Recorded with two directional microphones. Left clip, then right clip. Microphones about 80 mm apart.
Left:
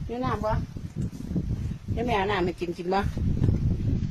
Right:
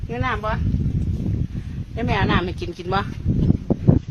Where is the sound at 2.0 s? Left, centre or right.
Centre.